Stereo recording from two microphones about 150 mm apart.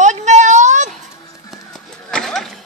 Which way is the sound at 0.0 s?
50° right (ahead or behind).